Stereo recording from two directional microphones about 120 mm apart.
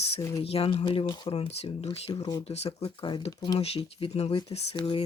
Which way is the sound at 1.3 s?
55° left (ahead or behind).